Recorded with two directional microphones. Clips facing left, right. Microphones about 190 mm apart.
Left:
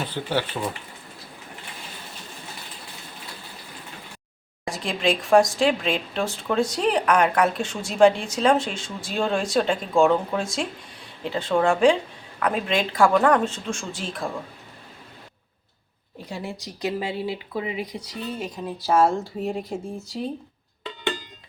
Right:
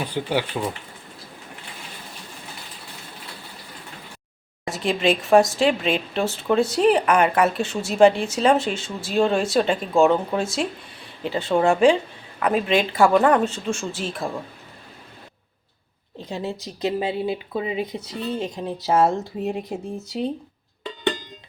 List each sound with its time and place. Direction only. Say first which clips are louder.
0.0 s speech: right 2 dB; 15° right (ahead or behind)
4.8 s speech: right 3 dB; 5° right (ahead or behind)
16.3 s speech: right 4 dB; 20° right (ahead or behind)